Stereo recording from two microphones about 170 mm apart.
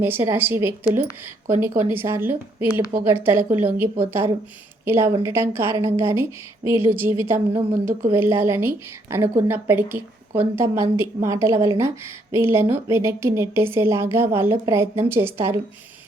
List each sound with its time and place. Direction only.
0.0 s a woman's voice: 15° right (ahead or behind)